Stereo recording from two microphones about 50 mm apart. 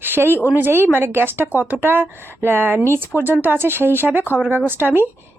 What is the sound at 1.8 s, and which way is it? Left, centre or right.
Speech, right.